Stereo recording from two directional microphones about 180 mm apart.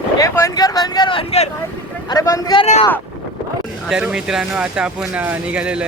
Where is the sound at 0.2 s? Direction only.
15° left (ahead or behind).